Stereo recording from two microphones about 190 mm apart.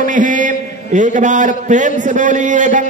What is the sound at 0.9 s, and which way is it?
A man's voice, 40° right (ahead or behind).